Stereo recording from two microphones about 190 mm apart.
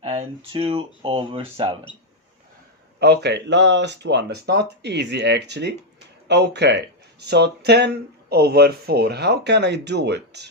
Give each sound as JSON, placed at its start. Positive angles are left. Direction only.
{"t": 0.0, "sound": "speech", "side_deg": -35}
{"t": 3.0, "sound": "speech", "side_deg": -60}